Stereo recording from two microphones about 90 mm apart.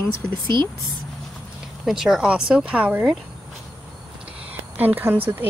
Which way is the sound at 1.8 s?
5° right (ahead or behind).